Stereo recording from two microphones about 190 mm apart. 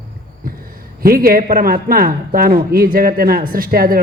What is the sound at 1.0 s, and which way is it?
A woman's voice, 50° right (ahead or behind).